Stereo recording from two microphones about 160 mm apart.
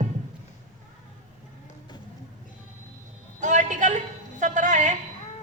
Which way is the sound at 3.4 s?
50° right (ahead or behind).